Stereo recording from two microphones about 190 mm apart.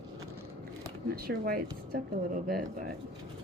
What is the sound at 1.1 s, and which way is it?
Speech, 50° right (ahead or behind).